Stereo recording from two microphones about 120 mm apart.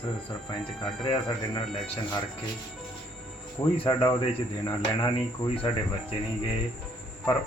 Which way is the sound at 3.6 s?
45° left (ahead or behind).